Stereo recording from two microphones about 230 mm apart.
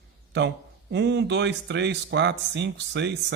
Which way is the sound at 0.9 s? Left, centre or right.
Right.